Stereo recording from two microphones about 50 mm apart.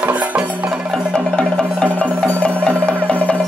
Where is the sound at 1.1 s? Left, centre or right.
Centre.